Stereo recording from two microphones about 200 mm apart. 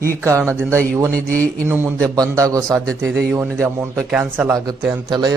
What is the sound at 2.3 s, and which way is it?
Speech, 15° right (ahead or behind).